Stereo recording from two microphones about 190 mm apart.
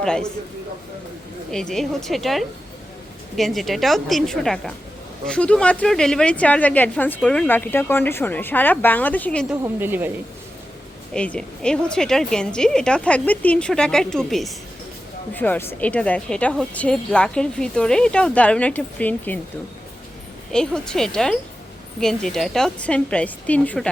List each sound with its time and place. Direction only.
0.0 s speech: 5° left (ahead or behind)
1.7 s a woman's voice: centre (ahead or behind)
9.8 s speech: 10° right (ahead or behind)
11.1 s a woman's voice: 5° left (ahead or behind)
20.5 s speech: 5° left (ahead or behind)